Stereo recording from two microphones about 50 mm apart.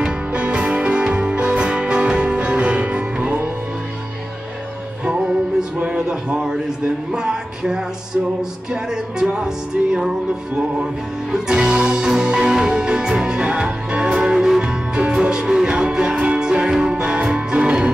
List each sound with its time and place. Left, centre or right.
0.0 s music: centre
5.6 s a sound: centre
7.1 s music: centre
8.9 s music: centre
11.3 s music: centre